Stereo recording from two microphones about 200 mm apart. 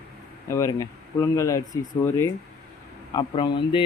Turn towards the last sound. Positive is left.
turn(degrees=25)  # may be behind; listen again after turning